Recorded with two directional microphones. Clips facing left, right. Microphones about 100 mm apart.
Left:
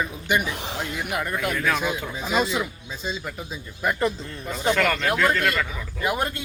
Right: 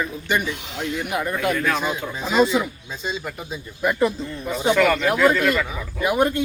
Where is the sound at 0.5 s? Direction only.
35° left (ahead or behind).